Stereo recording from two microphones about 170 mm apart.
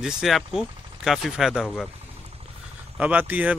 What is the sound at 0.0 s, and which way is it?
Speech, centre (ahead or behind).